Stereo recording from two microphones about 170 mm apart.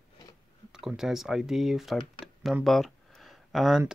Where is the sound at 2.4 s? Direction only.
Centre (ahead or behind).